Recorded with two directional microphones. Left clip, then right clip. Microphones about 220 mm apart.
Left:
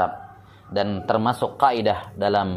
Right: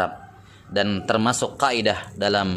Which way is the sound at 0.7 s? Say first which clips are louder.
Even; 25° right (ahead or behind).